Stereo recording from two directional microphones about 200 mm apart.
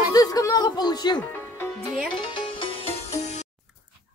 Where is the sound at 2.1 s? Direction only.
25° left (ahead or behind).